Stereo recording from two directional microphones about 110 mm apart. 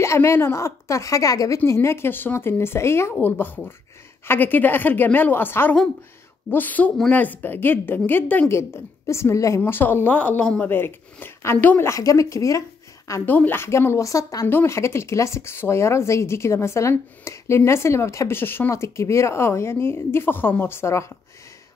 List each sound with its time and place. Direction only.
0.0 s speech: 25° left (ahead or behind)
9.6 s speech: 20° left (ahead or behind)
11.9 s speech: 30° left (ahead or behind)
13.3 s speech: 15° left (ahead or behind)